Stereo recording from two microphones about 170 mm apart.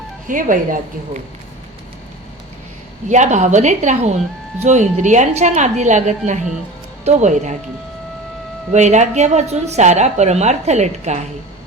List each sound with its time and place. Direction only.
0.3 s a woman's voice: 50° right (ahead or behind)
3.1 s a woman's voice: 45° right (ahead or behind)
8.7 s a woman's voice: 45° right (ahead or behind)